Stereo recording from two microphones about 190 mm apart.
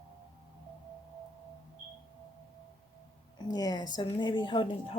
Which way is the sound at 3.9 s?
25° left (ahead or behind).